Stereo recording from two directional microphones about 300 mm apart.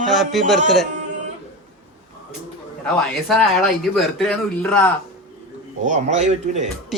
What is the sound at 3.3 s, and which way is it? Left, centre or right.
Speech, centre.